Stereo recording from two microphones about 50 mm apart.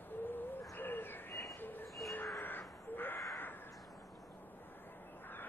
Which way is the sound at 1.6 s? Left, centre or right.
Left.